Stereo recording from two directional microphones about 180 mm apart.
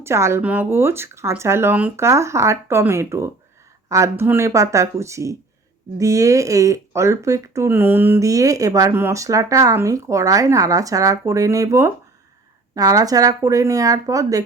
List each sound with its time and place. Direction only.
0.0 s speech: 15° right (ahead or behind)